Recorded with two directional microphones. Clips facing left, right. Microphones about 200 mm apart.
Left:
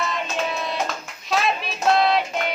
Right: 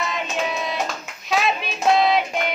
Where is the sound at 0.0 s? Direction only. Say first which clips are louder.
Even; centre (ahead or behind).